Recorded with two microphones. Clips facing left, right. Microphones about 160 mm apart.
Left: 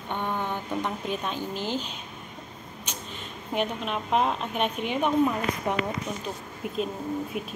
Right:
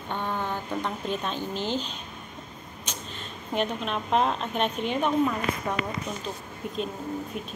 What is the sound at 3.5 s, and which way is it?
A woman's voice, 10° left (ahead or behind).